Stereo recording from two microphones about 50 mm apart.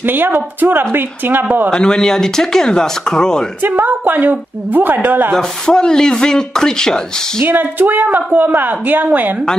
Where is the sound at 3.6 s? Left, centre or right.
Right.